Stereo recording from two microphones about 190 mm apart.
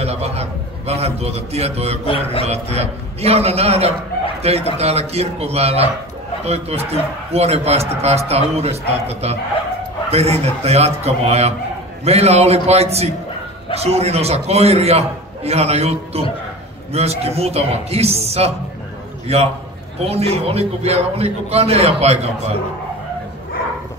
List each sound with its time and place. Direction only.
0.0 s a man's voice: 35° right (ahead or behind)